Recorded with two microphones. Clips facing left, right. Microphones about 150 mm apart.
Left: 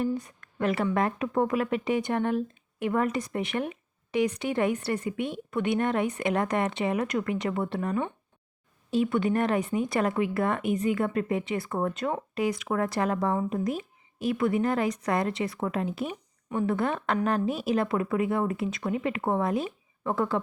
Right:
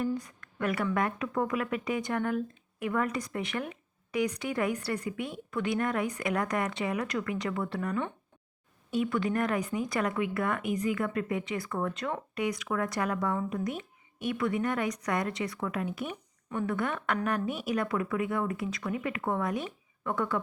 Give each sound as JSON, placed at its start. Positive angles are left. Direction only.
{"t": 0.0, "sound": "a woman's voice", "side_deg": 25}